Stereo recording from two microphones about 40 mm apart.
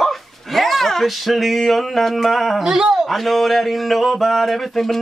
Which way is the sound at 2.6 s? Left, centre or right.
Centre.